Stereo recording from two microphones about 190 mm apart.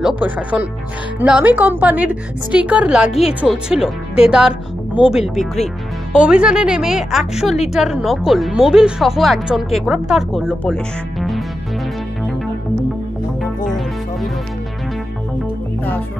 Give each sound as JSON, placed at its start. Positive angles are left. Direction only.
{"t": 0.2, "sound": "a woman's voice", "side_deg": -10}
{"t": 13.7, "sound": "music", "side_deg": 0}